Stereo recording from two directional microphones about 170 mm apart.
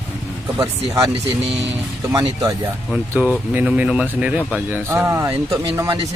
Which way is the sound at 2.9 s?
Centre (ahead or behind).